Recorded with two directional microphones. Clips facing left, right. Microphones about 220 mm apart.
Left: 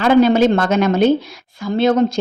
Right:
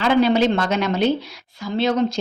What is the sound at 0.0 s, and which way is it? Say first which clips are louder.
Speech: left 5 dB; 50° left (ahead or behind).